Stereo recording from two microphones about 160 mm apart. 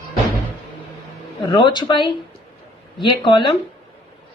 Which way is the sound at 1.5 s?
30° left (ahead or behind).